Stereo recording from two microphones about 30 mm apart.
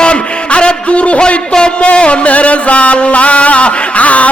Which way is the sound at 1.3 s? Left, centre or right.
Left.